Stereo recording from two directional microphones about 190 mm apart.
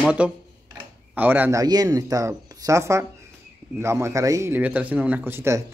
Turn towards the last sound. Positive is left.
turn(degrees=-15)  # may be behind; listen again after turning